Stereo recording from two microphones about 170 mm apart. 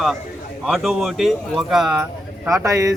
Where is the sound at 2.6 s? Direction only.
20° right (ahead or behind).